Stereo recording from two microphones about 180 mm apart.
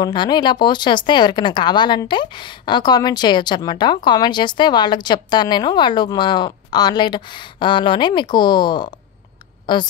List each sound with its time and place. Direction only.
0.0 s speech: 25° left (ahead or behind)